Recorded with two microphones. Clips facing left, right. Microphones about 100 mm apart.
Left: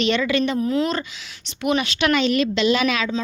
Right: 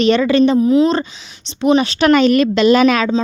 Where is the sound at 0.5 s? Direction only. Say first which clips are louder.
Right 9 dB; 20° right (ahead or behind).